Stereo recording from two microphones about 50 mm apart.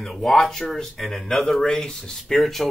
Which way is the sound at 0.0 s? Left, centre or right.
Centre.